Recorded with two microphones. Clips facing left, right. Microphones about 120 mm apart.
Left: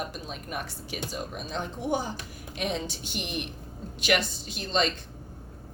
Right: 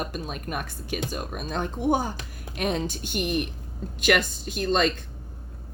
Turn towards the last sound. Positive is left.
turn(degrees=-50)  # may be behind; listen again after turning